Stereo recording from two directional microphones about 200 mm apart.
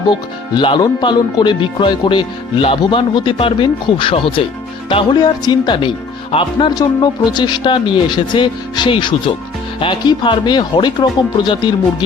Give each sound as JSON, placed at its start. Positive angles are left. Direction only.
{"t": 0.1, "sound": "speech", "side_deg": 25}